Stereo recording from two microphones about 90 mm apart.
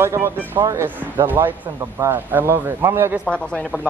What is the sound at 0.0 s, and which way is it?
Speech, 30° right (ahead or behind).